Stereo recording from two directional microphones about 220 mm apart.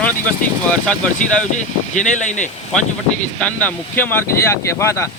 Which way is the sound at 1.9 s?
35° left (ahead or behind).